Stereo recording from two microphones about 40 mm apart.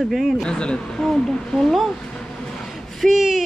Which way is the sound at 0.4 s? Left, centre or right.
Left.